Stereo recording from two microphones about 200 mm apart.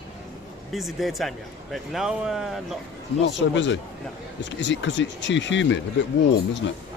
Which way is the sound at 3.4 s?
65° left (ahead or behind).